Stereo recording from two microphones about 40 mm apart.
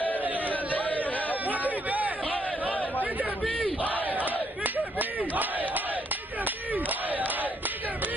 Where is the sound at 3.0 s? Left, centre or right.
Right.